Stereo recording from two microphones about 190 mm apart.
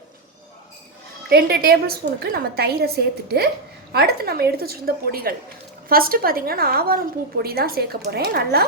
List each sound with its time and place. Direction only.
1.3 s a woman's voice: 55° right (ahead or behind)